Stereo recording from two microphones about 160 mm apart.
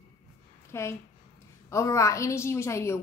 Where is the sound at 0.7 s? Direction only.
15° left (ahead or behind).